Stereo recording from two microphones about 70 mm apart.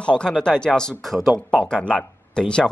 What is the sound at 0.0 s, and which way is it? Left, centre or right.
Speech, centre.